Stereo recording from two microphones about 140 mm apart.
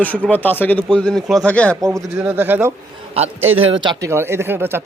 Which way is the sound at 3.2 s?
45° right (ahead or behind).